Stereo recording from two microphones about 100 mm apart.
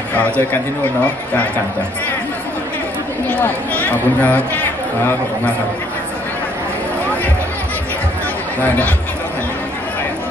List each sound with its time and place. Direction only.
0.1 s speech: 15° left (ahead or behind)
3.3 s speech: 15° left (ahead or behind)
8.5 s speech: 15° left (ahead or behind)